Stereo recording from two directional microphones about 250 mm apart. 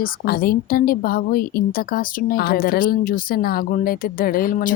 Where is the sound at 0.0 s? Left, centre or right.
Left.